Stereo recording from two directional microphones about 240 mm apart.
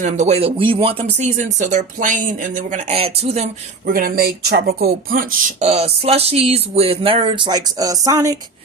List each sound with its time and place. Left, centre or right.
0.0 s speech: right